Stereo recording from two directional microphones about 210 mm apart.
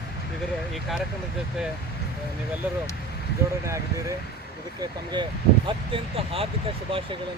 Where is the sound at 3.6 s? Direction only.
15° right (ahead or behind).